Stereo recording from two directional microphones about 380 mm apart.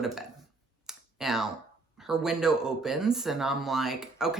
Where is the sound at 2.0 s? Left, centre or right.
Centre.